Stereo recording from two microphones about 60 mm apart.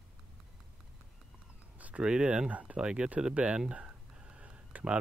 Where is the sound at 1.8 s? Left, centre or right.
Right.